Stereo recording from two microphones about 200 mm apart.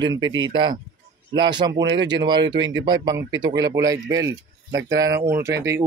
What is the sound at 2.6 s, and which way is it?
Speech, 70° right (ahead or behind).